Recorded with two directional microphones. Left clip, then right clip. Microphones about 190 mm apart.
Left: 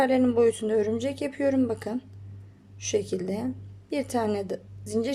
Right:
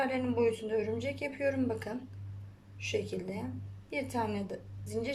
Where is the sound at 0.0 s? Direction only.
30° left (ahead or behind).